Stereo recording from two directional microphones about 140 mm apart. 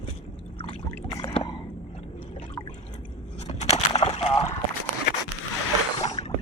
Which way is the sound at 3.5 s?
50° left (ahead or behind).